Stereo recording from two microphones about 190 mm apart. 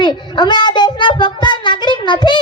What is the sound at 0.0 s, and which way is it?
Child singing, 25° left (ahead or behind).